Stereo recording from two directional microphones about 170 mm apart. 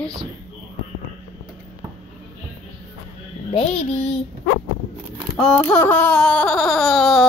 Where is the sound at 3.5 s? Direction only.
35° left (ahead or behind).